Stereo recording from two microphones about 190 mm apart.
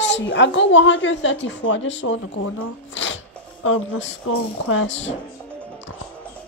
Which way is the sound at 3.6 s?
80° left.